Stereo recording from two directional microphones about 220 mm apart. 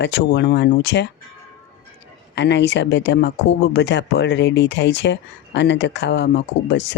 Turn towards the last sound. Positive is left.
turn(degrees=50)  # may be behind; listen again after turning